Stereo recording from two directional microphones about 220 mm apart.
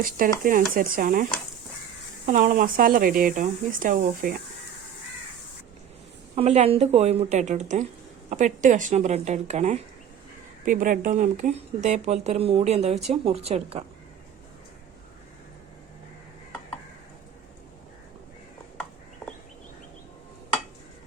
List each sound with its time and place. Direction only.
0.4 s speech: 40° right (ahead or behind)
6.3 s speech: 30° right (ahead or behind)